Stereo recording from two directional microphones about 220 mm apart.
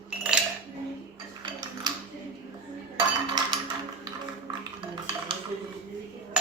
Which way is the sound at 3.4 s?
20° right (ahead or behind).